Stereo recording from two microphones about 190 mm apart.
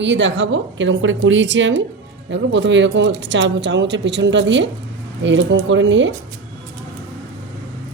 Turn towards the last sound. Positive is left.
turn(degrees=-75)  # may be behind; listen again after turning